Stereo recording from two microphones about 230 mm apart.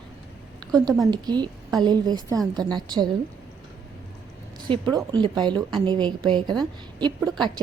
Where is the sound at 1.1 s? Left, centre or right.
Centre.